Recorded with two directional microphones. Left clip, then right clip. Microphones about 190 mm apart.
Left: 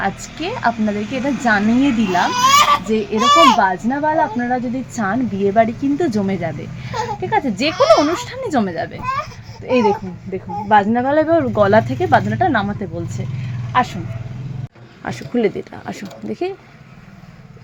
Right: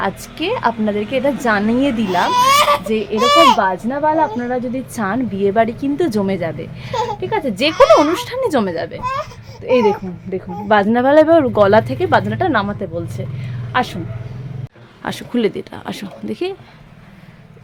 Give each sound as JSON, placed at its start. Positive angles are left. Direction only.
{"t": 0.0, "sound": "a woman's voice", "side_deg": -25}
{"t": 10.7, "sound": "speech", "side_deg": -40}
{"t": 11.1, "sound": "a woman's voice", "side_deg": -25}
{"t": 13.7, "sound": "speech", "side_deg": -35}
{"t": 15.0, "sound": "speech", "side_deg": -15}